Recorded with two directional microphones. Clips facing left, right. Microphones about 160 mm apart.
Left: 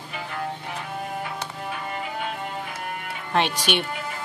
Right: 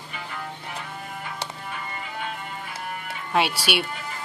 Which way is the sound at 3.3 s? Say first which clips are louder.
Even; 10° right (ahead or behind).